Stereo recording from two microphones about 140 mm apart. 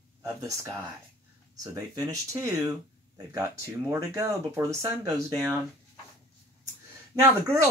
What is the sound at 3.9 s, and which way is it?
Speech, 20° right (ahead or behind).